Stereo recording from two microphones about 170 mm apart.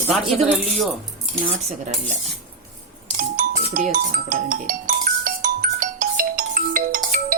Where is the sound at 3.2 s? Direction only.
55° right (ahead or behind).